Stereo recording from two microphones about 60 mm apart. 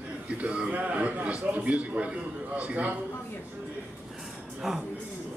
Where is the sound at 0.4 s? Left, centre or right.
Centre.